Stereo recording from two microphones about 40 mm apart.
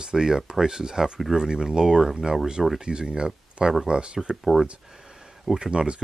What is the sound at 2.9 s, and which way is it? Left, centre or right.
Speech, right.